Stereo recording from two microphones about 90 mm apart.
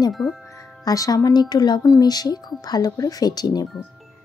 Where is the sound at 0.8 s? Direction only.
40° left (ahead or behind).